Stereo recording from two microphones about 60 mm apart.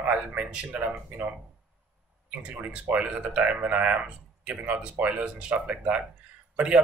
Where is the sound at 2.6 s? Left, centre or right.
Right.